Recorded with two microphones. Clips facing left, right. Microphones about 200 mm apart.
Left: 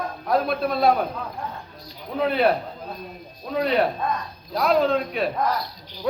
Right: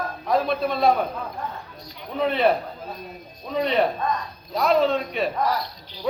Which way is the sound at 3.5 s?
Centre (ahead or behind).